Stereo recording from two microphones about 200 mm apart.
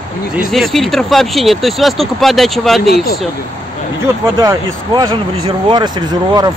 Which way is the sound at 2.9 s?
50° left (ahead or behind).